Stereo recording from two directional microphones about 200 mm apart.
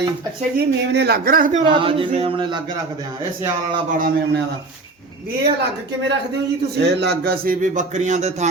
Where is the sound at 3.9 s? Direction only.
50° right (ahead or behind).